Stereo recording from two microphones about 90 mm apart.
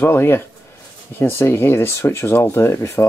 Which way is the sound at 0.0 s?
25° left (ahead or behind).